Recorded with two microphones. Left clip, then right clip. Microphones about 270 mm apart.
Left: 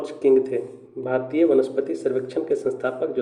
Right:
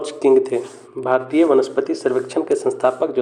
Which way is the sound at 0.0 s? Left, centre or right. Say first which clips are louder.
Right 4 dB; centre.